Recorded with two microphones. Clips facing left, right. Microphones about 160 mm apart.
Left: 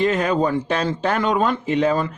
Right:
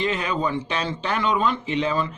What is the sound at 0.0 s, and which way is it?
Speech, 45° left (ahead or behind).